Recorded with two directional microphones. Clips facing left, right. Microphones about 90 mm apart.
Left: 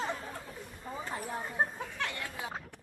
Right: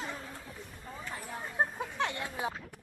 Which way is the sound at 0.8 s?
15° left (ahead or behind).